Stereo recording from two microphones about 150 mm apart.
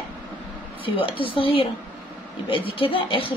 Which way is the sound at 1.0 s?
35° left (ahead or behind).